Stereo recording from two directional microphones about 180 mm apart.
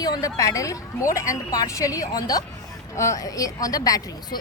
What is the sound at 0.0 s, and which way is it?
Speech, 20° left (ahead or behind).